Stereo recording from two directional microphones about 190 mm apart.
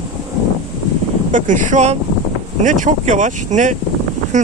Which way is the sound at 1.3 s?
40° right (ahead or behind).